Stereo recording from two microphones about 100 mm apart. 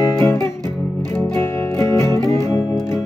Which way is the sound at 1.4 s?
25° left (ahead or behind).